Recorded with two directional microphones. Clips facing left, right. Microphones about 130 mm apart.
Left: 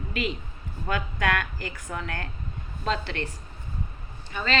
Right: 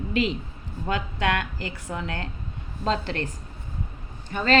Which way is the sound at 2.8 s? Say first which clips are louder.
Right 3 dB; 35° right (ahead or behind).